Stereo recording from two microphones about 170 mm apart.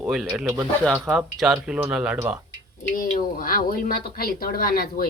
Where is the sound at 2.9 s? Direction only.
55° left (ahead or behind).